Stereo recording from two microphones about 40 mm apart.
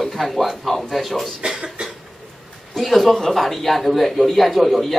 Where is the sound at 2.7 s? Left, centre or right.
Centre.